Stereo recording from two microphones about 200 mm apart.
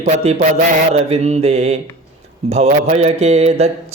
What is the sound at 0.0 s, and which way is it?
Mantra, 35° right (ahead or behind).